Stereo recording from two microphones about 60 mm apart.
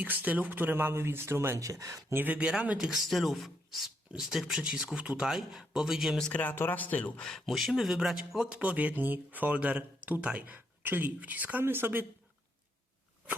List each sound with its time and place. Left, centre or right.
0.0 s speech: right
1.5 s speech: right
2.1 s speech: right
2.4 s speech: centre
2.7 s speech: centre
5.3 s speech: centre
6.1 s speech: centre
6.4 s speech: left
7.2 s speech: centre; by 11.6 s right
11.6 s speech: right